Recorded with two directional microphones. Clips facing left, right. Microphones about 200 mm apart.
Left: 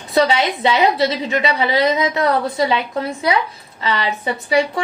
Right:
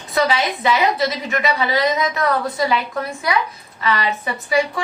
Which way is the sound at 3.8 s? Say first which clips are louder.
Even; 25° left (ahead or behind).